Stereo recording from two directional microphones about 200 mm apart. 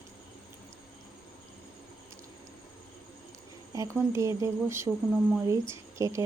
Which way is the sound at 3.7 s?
15° right (ahead or behind).